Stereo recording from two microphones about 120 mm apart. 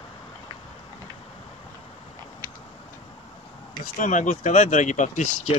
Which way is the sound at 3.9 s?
90° left.